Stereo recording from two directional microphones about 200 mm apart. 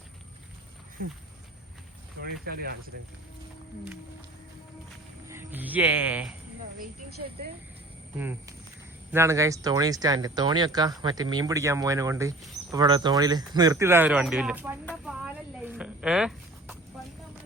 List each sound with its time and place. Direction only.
2.2 s speech: 50° right (ahead or behind)
5.3 s speech: 10° right (ahead or behind)
9.1 s speech: 15° right (ahead or behind)
15.0 s a sound: 5° right (ahead or behind)